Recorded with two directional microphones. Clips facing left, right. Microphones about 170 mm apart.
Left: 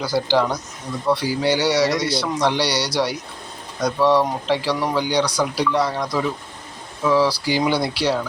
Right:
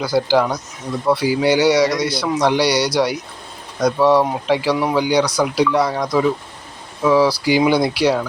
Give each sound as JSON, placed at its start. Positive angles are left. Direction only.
{"t": 0.0, "sound": "speech", "side_deg": -15}